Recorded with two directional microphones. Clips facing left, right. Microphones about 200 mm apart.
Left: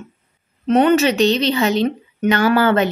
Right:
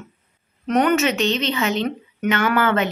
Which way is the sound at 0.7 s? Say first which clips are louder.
Left 4 dB; 25° left (ahead or behind).